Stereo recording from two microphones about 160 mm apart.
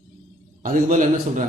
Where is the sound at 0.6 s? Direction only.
55° right (ahead or behind).